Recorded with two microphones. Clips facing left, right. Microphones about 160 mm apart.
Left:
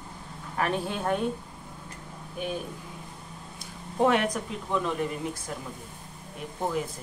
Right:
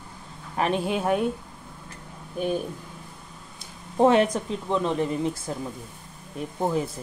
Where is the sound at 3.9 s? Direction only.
30° right (ahead or behind).